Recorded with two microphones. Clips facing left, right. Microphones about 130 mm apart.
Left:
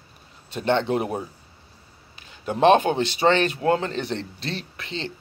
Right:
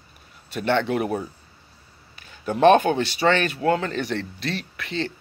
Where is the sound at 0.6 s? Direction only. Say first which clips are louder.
Even; 30° left (ahead or behind).